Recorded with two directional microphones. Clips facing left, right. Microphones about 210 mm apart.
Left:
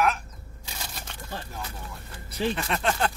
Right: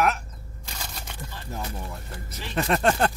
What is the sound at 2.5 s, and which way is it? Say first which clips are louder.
Speech: right 5 dB; 45° right (ahead or behind).